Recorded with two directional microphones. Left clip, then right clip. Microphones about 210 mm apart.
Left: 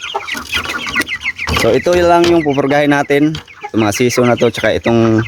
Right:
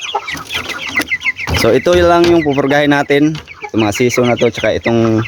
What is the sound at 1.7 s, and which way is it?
Speech, centre (ahead or behind).